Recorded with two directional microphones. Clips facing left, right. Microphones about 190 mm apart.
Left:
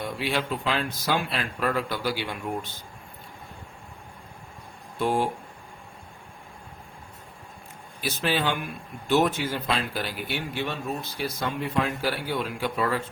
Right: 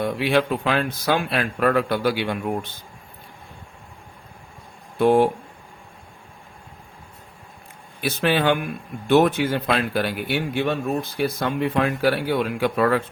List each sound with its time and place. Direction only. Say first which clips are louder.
0.0 s a man's voice: right 8 dB; 60° right (ahead or behind)
4.9 s a man's voice: right 9 dB; 65° right (ahead or behind)
8.0 s a man's voice: right 6 dB; 60° right (ahead or behind)